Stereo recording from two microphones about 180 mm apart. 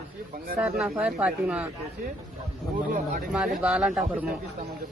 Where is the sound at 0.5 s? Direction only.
5° right (ahead or behind).